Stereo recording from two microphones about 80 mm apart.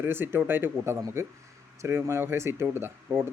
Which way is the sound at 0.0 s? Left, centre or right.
Right.